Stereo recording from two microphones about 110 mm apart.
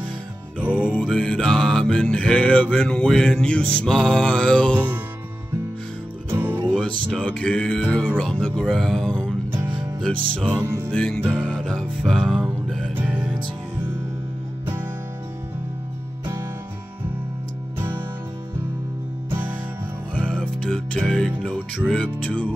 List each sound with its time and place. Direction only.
1.0 s music: 5° left (ahead or behind)
4.7 s music: 15° right (ahead or behind)
6.3 s music: 20° right (ahead or behind)
7.1 s music: 10° left (ahead or behind)
10.6 s music: 20° right (ahead or behind)
10.9 s music: 5° left (ahead or behind)
11.3 s music: 10° right (ahead or behind)
11.6 s music: 5° left (ahead or behind)
12.9 s music: 15° right (ahead or behind)
20.2 s music: 10° left (ahead or behind)